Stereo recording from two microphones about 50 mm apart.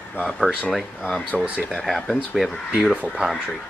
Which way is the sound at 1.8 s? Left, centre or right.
Centre.